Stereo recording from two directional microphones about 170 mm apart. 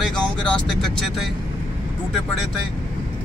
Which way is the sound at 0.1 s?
5° left (ahead or behind).